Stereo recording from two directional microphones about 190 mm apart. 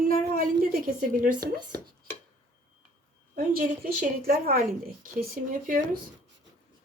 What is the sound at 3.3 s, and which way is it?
Speech, 50° right (ahead or behind).